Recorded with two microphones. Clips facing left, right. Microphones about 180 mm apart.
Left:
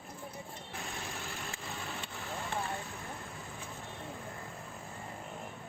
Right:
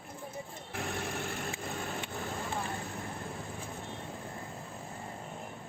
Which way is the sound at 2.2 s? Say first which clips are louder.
Left 1 dB; 35° right (ahead or behind).